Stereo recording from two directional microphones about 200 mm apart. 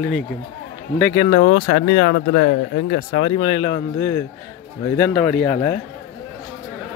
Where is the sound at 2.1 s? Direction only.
65° left (ahead or behind).